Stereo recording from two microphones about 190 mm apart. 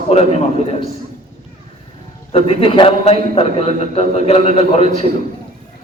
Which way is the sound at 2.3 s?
30° left (ahead or behind).